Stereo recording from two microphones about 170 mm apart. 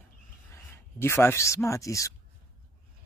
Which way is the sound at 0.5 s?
15° left (ahead or behind).